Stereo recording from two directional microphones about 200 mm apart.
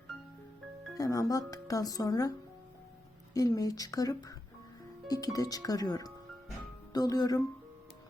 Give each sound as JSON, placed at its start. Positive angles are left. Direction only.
{"t": 0.9, "sound": "speech", "side_deg": 15}
{"t": 3.3, "sound": "speech", "side_deg": 15}